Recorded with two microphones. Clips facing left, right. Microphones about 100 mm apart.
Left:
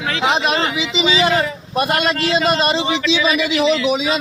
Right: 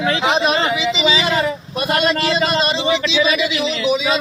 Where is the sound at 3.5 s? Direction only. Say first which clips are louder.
Left 3 dB; 50° left (ahead or behind).